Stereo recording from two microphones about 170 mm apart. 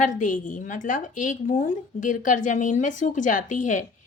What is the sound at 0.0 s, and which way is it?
A woman's voice, 50° left (ahead or behind).